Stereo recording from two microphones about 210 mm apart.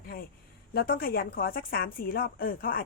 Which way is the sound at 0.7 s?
45° left (ahead or behind).